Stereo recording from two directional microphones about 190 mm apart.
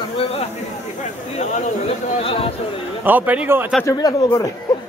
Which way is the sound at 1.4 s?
40° left (ahead or behind).